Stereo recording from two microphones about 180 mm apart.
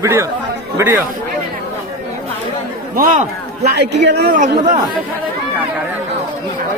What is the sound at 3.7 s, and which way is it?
Speech, 70° right (ahead or behind).